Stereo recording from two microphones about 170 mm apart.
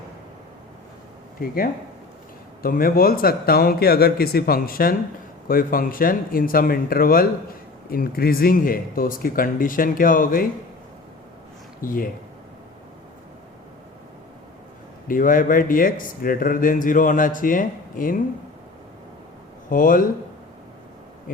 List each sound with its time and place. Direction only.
1.4 s speech: 60° left (ahead or behind)
11.8 s speech: 55° left (ahead or behind)
15.0 s speech: 55° left (ahead or behind)
19.7 s speech: 55° left (ahead or behind)